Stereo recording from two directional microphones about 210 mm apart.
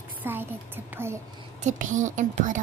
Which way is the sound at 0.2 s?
10° right (ahead or behind).